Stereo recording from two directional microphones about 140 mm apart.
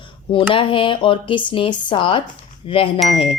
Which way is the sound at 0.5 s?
40° left (ahead or behind).